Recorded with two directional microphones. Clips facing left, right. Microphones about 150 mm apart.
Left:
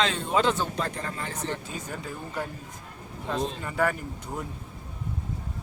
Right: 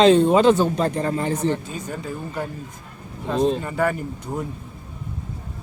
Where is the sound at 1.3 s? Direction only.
15° right (ahead or behind).